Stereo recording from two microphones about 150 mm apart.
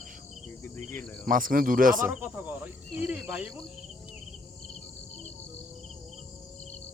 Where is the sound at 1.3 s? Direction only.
65° right (ahead or behind).